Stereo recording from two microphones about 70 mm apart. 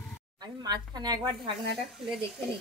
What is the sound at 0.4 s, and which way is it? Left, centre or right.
Speech, right.